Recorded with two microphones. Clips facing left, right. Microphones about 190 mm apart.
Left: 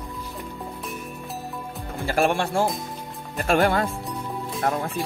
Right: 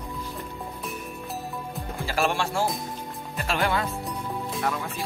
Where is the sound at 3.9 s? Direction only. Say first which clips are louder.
Left 1 dB; centre (ahead or behind).